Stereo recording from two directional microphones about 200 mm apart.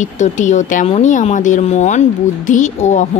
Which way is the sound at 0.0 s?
35° left (ahead or behind).